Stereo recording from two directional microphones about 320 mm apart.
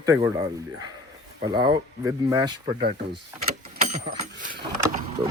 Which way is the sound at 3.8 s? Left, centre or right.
Right.